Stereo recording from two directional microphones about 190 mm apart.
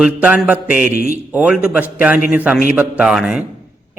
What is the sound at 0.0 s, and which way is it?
A man's voice, 5° right (ahead or behind).